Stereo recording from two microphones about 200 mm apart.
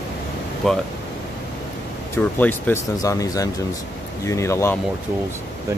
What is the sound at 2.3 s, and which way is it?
Speech, 10° left (ahead or behind).